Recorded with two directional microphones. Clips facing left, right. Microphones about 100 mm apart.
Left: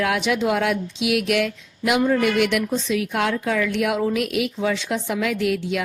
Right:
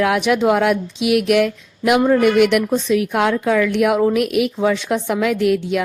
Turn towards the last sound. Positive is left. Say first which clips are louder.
# right 5 dB
turn(degrees=-45)  # may be behind; listen again after turning